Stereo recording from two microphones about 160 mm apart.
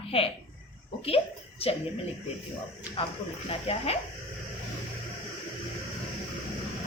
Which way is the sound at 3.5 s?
35° left (ahead or behind).